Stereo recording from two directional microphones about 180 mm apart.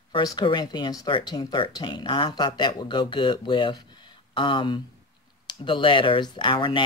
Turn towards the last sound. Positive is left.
turn(degrees=25)  # may be behind; listen again after turning